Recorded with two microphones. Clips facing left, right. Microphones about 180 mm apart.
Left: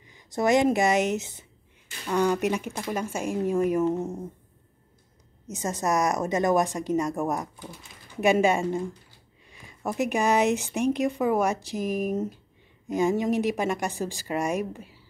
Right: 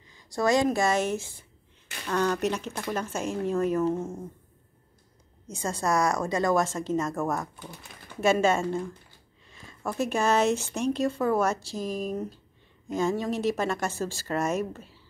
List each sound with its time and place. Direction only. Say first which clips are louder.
0.0 s speech: left 1 dB; 20° left (ahead or behind)
5.5 s speech: left 1 dB; 15° left (ahead or behind)